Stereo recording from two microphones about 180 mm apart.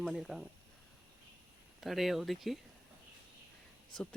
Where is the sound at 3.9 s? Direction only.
5° left (ahead or behind).